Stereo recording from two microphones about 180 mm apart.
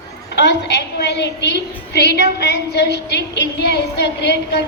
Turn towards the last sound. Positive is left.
turn(degrees=70)  # may be behind; listen again after turning